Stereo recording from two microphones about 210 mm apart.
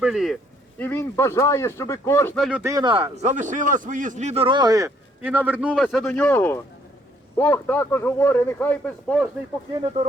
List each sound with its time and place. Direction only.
0.0 s speech: centre (ahead or behind)
0.8 s speech: 10° left (ahead or behind)
2.4 s speech: centre (ahead or behind)
2.6 s a man's voice: 20° right (ahead or behind); by 9.3 s centre (ahead or behind)